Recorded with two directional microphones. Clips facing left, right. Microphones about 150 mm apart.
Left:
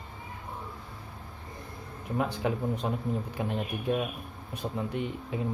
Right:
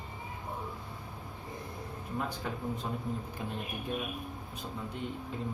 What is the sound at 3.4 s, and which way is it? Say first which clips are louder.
Speech: left 9 dB; 70° left (ahead or behind).